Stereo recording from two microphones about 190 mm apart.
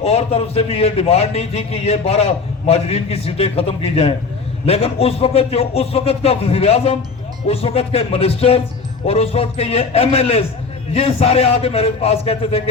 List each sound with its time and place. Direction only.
0.0 s a man's voice: 30° left (ahead or behind)